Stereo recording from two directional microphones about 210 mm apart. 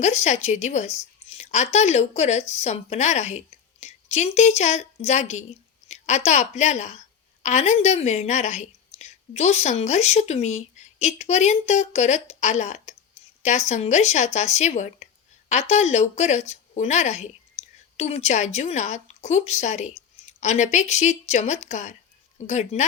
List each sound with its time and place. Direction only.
0.0 s a woman's voice: 35° left (ahead or behind)
17.6 s whispering: 30° left (ahead or behind)
17.9 s a woman's voice: 30° left (ahead or behind)